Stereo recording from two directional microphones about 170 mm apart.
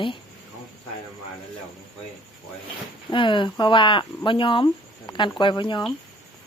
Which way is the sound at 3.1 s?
30° left (ahead or behind).